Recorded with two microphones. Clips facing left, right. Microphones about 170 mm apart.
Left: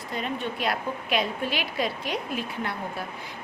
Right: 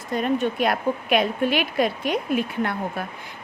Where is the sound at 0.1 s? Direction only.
50° right (ahead or behind).